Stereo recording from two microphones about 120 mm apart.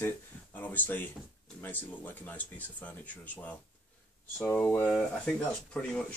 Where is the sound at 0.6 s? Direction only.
15° left (ahead or behind).